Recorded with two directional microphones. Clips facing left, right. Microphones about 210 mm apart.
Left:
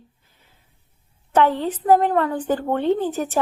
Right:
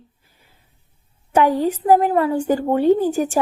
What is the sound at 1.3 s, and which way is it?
A woman's voice, 10° right (ahead or behind).